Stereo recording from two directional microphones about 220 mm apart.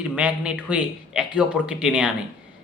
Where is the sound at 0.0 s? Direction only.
5° right (ahead or behind).